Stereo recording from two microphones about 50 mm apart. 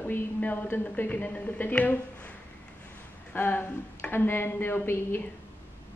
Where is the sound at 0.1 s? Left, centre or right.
Left.